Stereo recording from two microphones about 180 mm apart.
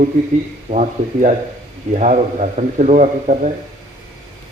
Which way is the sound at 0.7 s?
40° right (ahead or behind).